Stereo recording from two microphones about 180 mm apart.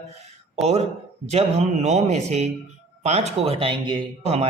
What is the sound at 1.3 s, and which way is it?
Speech, 35° right (ahead or behind).